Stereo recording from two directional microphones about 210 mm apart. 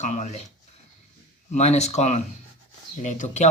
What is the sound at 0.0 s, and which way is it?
Speech, 35° left (ahead or behind).